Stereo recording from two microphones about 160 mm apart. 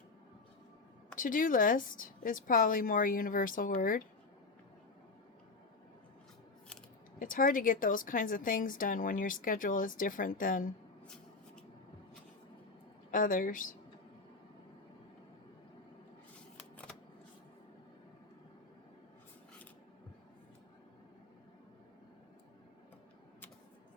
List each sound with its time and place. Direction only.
1.2 s a woman's voice: 55° left (ahead or behind)
7.2 s a woman's voice: 60° left (ahead or behind)
13.1 s a woman's voice: 60° left (ahead or behind)